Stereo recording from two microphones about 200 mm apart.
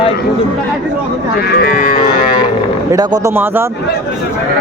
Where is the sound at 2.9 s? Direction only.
20° right (ahead or behind).